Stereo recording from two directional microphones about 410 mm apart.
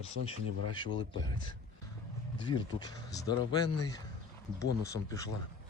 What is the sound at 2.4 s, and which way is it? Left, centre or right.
Speech, centre.